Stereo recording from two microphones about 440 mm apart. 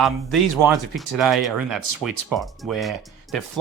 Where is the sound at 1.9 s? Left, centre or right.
Right.